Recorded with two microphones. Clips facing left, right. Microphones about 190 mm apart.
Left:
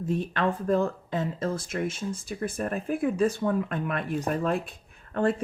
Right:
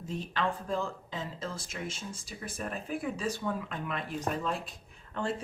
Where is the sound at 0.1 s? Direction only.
55° left (ahead or behind).